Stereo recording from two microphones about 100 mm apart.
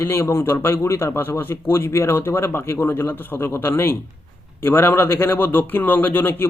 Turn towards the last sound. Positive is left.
turn(degrees=20)  # may be behind; listen again after turning